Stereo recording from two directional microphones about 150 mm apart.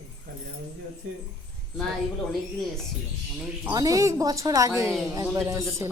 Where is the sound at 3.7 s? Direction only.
25° right (ahead or behind).